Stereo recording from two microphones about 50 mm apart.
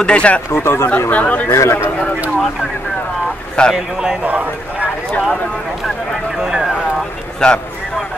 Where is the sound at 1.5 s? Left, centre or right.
Left.